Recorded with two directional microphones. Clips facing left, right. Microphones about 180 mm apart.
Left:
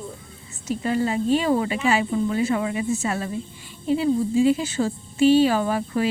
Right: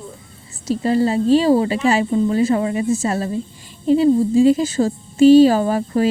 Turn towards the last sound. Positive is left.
turn(degrees=-40)  # may be behind; listen again after turning